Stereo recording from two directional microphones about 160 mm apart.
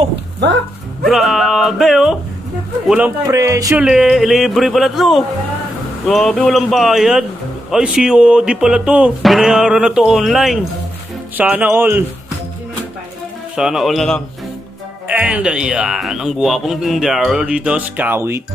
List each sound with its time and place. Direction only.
1.0 s speech: centre (ahead or behind)
3.3 s speech: 20° right (ahead or behind)
3.7 s speech: 5° right (ahead or behind)
13.6 s speech: 5° right (ahead or behind)
15.0 s speech: 10° right (ahead or behind)